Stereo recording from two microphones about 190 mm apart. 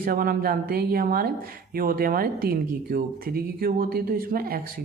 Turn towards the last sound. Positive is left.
turn(degrees=-50)  # may be behind; listen again after turning